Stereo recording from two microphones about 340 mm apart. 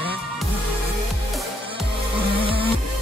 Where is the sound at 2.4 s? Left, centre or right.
Centre.